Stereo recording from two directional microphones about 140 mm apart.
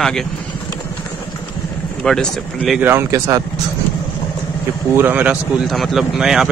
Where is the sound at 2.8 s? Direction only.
20° right (ahead or behind).